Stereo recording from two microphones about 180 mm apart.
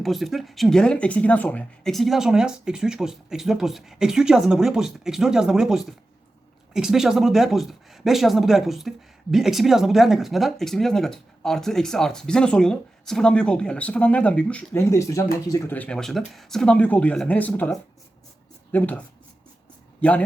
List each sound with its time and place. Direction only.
0.0 s speech: centre (ahead or behind)